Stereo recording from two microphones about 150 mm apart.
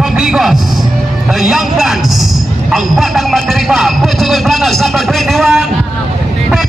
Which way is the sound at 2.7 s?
Centre (ahead or behind).